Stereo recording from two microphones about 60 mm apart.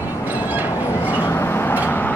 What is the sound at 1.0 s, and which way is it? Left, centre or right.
Vehicle, left.